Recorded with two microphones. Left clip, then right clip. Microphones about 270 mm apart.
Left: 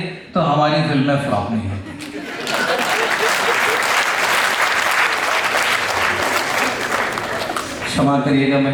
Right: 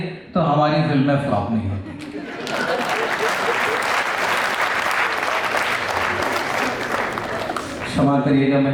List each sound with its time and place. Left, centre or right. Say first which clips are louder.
0.3 s speech: left 2 dB; right
0.6 s a man's voice: left 2 dB; centre
2.5 s applause: left 3 dB; centre
8.0 s a man's voice: left 1 dB; centre
8.3 s a man's voice: left 1 dB; centre